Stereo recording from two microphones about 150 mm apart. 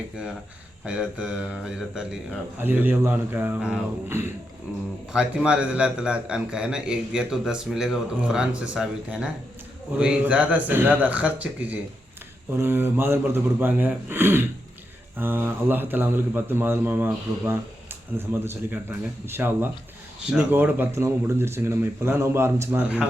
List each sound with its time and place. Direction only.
0.9 s a man's voice: 5° right (ahead or behind)